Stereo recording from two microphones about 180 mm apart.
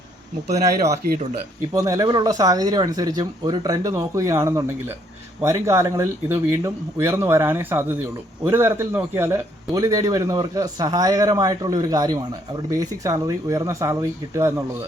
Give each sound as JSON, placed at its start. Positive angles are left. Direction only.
{"t": 1.7, "sound": "a man's voice", "side_deg": -15}